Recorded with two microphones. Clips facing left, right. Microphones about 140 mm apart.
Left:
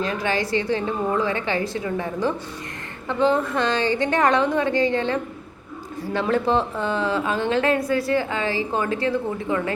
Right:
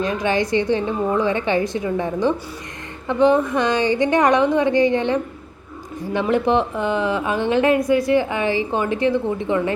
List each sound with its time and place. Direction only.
0.0 s a woman's voice: 20° right (ahead or behind)